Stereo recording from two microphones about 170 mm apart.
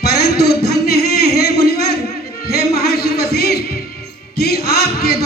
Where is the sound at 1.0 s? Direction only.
65° left (ahead or behind).